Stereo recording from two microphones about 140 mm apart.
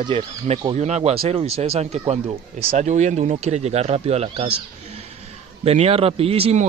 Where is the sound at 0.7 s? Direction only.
55° right (ahead or behind).